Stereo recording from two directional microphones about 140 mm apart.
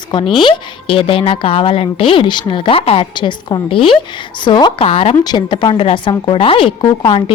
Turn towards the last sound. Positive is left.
turn(degrees=35)  # may be behind; listen again after turning